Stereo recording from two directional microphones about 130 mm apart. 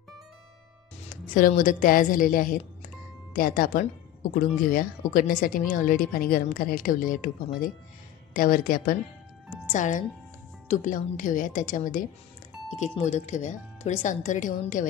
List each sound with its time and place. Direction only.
1.2 s a woman's voice: 90° left
9.7 s speech: 75° left (ahead or behind)
10.7 s a woman's voice: 85° left
12.6 s doorbell: 65° left (ahead or behind)
13.0 s speech: 65° left (ahead or behind); by 14.9 s 80° left